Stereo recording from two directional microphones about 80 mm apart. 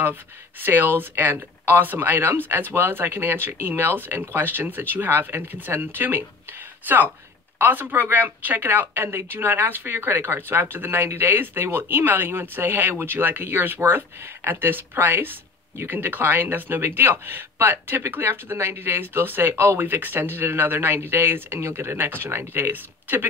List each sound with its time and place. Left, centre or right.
0.6 s speech: right